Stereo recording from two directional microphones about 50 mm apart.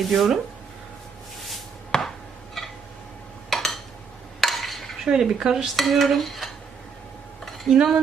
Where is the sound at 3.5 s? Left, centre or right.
Centre.